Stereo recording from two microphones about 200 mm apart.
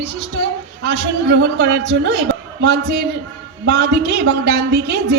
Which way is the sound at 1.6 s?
65° right (ahead or behind).